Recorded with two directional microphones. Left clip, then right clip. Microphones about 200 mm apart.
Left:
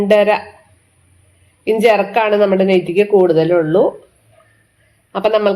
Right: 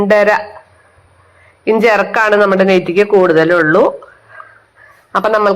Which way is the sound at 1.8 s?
40° right (ahead or behind).